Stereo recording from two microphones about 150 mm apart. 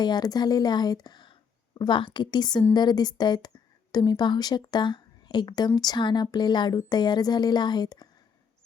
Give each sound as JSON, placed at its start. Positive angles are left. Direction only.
{"t": 0.0, "sound": "a woman's voice", "side_deg": 25}